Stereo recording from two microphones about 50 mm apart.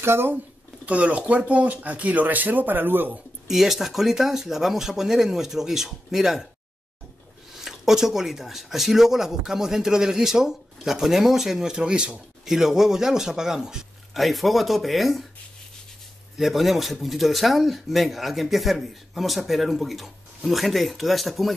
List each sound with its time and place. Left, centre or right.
0.0 s speech: right
0.8 s speech: right
3.4 s speech: centre
7.5 s speech: centre
12.4 s speech: centre
14.1 s speech: centre
16.3 s speech: centre